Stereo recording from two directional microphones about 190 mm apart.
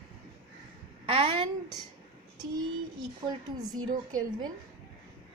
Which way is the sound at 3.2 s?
25° right (ahead or behind).